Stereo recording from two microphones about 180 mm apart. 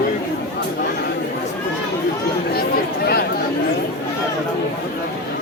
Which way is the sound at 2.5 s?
60° left (ahead or behind).